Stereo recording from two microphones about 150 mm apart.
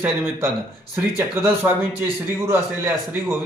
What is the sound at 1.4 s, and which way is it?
Speech, 15° right (ahead or behind).